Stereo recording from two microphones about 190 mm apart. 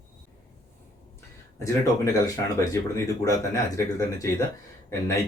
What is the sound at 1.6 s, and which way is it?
Speech, 15° left (ahead or behind).